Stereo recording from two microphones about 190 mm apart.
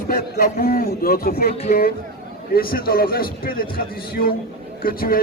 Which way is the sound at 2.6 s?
50° left (ahead or behind).